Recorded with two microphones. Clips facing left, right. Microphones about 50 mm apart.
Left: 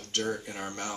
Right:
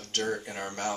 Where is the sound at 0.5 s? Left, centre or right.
Right.